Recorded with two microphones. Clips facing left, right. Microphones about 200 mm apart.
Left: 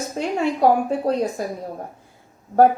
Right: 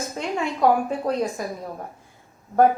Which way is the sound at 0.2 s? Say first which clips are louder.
Left 4 dB; 40° left (ahead or behind).